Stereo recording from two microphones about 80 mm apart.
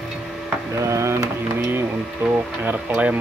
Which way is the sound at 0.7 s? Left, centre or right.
Right.